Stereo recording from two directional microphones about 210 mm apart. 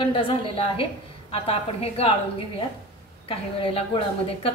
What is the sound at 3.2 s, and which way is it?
Speech, 25° left (ahead or behind).